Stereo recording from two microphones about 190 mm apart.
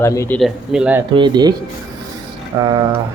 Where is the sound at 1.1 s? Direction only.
25° right (ahead or behind).